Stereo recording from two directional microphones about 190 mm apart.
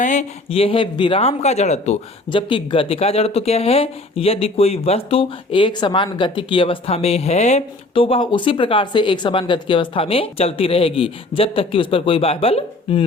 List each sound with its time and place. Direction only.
0.0 s a man's voice: 40° left (ahead or behind)